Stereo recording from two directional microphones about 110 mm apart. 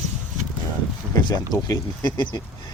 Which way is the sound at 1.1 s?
35° left (ahead or behind).